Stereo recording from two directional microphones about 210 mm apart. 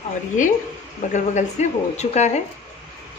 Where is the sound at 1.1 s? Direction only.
35° left (ahead or behind).